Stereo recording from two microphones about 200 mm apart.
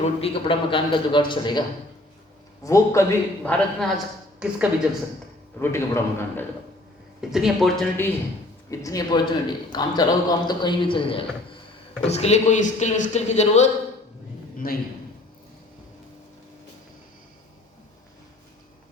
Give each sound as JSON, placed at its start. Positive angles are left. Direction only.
{"t": 0.2, "sound": "a man's voice", "side_deg": 25}
{"t": 2.6, "sound": "a man's voice", "side_deg": 15}
{"t": 5.5, "sound": "a man's voice", "side_deg": 10}
{"t": 7.2, "sound": "a man's voice", "side_deg": 0}
{"t": 8.7, "sound": "a man's voice", "side_deg": 15}
{"t": 14.6, "sound": "a man's voice", "side_deg": 50}